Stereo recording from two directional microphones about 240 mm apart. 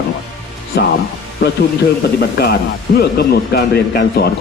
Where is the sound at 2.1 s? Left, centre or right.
Left.